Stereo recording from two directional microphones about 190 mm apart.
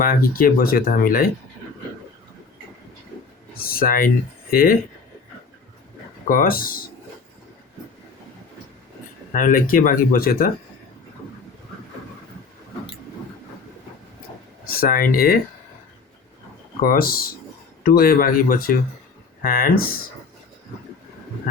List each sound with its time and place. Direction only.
0.0 s speech: 50° left (ahead or behind)
3.6 s speech: 50° left (ahead or behind)
6.2 s speech: 45° left (ahead or behind)
9.3 s speech: 45° left (ahead or behind)
14.7 s speech: 50° left (ahead or behind)
16.8 s speech: 50° left (ahead or behind)